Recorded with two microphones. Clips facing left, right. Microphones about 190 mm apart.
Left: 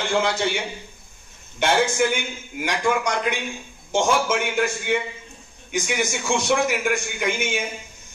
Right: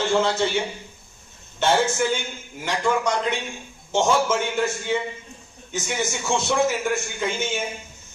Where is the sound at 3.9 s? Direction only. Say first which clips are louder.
Even; 10° left (ahead or behind).